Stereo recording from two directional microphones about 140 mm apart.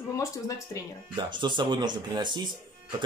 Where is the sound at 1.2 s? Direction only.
35° right (ahead or behind).